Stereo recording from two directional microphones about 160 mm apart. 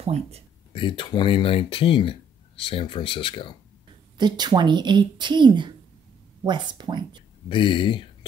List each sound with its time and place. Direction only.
0.0 s speech: 40° right (ahead or behind)
0.7 s speech: 30° left (ahead or behind)
4.2 s a woman's voice: 25° right (ahead or behind)
7.4 s speech: 30° left (ahead or behind)